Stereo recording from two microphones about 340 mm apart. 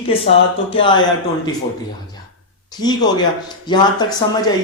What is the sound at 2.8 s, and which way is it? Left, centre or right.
Speech, centre.